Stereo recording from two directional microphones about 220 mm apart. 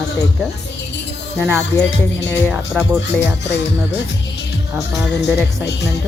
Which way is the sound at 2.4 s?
5° right (ahead or behind).